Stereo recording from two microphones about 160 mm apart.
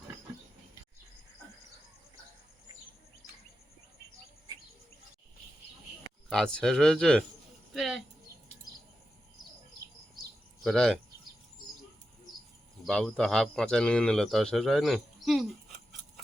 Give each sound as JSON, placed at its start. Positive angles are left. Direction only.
{"t": 6.2, "sound": "speech", "side_deg": 5}
{"t": 7.7, "sound": "a sound", "side_deg": 0}
{"t": 10.6, "sound": "speech", "side_deg": 5}
{"t": 12.8, "sound": "speech", "side_deg": 5}